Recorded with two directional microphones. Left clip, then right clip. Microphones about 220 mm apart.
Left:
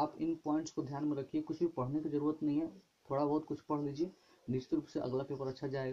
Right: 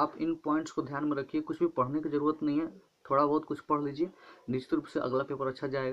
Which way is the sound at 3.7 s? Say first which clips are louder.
Right 7 dB; 5° right (ahead or behind).